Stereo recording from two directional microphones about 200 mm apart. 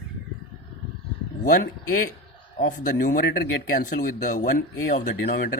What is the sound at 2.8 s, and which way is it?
Speech, 45° left (ahead or behind).